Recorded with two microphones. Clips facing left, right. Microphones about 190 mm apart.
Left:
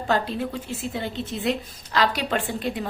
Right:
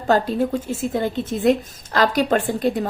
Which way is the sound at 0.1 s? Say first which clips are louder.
Right 7 dB; 45° right (ahead or behind).